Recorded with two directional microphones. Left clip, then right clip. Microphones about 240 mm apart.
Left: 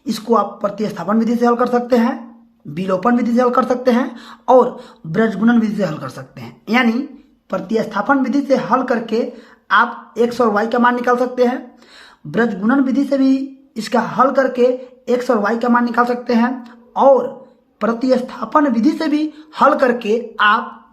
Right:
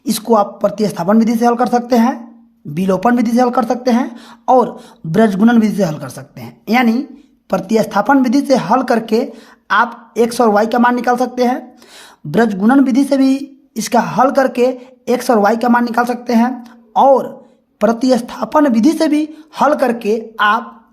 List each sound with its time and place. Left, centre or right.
0.1 s a woman's voice: right